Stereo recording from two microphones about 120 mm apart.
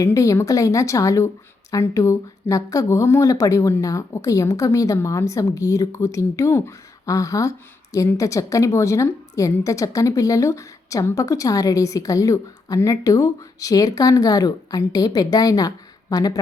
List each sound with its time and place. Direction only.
0.0 s a woman's voice: 25° left (ahead or behind)